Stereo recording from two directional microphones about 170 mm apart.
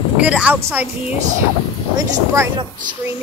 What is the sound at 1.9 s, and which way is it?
Speech, 15° right (ahead or behind).